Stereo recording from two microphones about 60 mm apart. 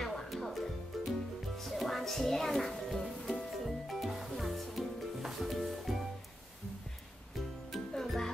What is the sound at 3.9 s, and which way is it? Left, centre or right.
Music, centre.